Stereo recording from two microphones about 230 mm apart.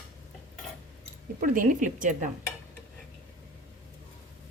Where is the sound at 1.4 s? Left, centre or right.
Right.